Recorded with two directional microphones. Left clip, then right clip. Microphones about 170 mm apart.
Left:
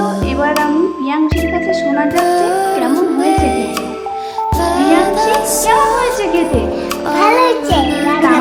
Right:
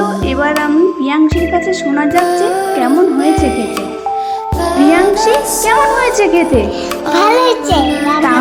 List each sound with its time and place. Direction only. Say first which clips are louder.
2.1 s music: right 1 dB; centre (ahead or behind)
4.8 s music: right 4 dB; centre (ahead or behind)
6.0 s music: right 3 dB; 35° right (ahead or behind)
7.7 s music: right 1 dB; centre (ahead or behind)